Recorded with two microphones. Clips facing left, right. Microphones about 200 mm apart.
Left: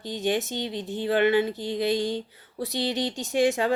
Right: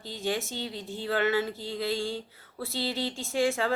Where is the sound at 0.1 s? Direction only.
20° left (ahead or behind).